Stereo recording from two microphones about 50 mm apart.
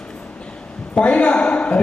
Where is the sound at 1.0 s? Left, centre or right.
Left.